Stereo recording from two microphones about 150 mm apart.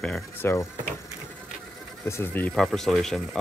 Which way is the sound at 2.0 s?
15° left (ahead or behind).